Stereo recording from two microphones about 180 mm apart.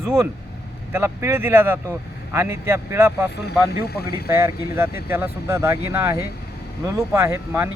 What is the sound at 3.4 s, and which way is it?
Speech, 60° left (ahead or behind).